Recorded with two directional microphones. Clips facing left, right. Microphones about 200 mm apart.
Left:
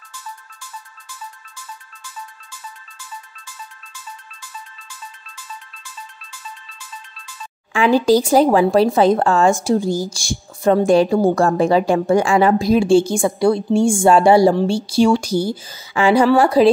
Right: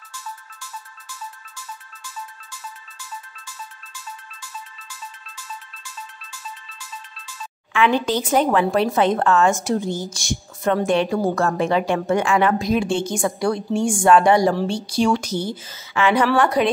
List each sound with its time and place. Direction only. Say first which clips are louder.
7.7 s a woman's voice: left 6 dB; 35° left (ahead or behind)